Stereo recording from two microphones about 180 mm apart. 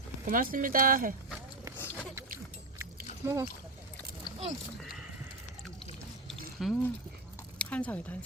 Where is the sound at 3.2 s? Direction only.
15° right (ahead or behind).